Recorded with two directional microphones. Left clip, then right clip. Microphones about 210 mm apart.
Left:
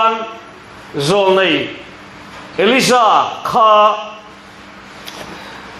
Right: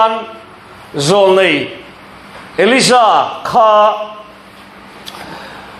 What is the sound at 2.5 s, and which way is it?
A man's voice, 25° right (ahead or behind).